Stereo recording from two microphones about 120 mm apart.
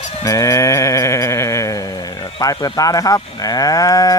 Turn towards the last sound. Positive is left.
turn(degrees=30)  # may be behind; listen again after turning